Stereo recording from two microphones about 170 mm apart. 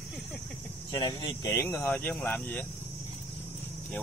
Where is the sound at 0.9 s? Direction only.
25° left (ahead or behind); by 2.6 s 10° left (ahead or behind).